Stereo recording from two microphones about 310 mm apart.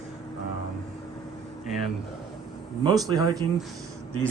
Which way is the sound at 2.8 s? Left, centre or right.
Centre.